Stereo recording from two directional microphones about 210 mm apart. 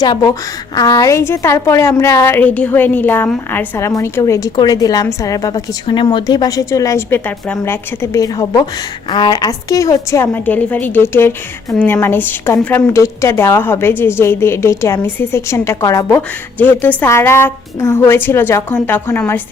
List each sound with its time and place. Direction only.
0.0 s a woman's voice: 20° left (ahead or behind)